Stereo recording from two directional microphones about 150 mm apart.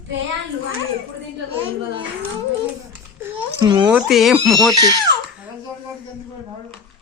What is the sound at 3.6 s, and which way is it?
Speech, 30° right (ahead or behind).